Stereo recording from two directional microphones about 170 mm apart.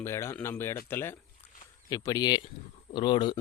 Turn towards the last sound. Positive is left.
turn(degrees=25)  # may be behind; listen again after turning